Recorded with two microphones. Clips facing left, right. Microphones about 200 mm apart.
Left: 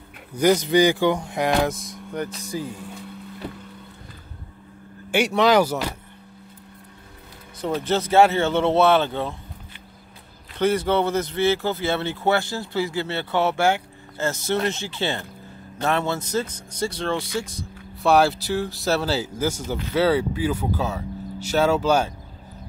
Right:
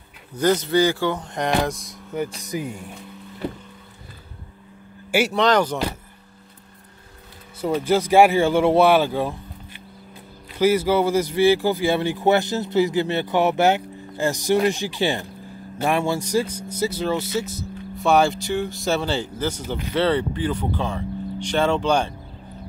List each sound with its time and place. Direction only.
0.4 s speech: 15° left (ahead or behind)
2.2 s speech: 15° right (ahead or behind)
5.1 s speech: 5° right (ahead or behind)
5.4 s speech: 10° left (ahead or behind)
7.6 s speech: 10° right (ahead or behind)
10.5 s speech: 5° right (ahead or behind)